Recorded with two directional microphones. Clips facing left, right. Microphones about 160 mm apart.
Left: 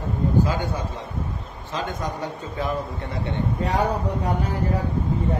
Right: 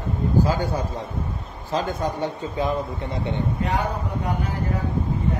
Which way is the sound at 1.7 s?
30° right (ahead or behind).